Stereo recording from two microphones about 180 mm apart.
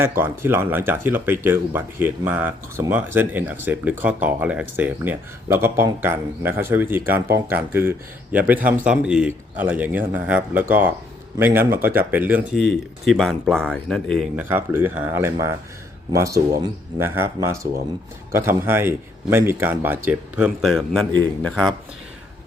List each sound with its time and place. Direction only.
0.2 s speech: 10° right (ahead or behind); by 14.3 s 5° left (ahead or behind)
14.3 s speech: 10° right (ahead or behind)